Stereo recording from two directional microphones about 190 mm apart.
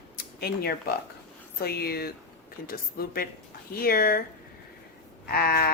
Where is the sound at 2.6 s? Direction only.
50° left (ahead or behind).